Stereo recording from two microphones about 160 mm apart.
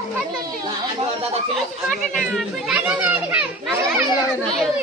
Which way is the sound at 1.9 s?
Centre (ahead or behind).